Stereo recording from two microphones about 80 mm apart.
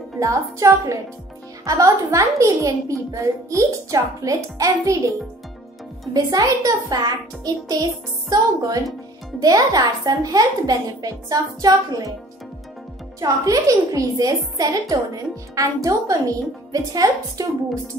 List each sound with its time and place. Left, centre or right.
0.2 s a child's voice: right
6.1 s a child's voice: right
13.2 s a child's voice: right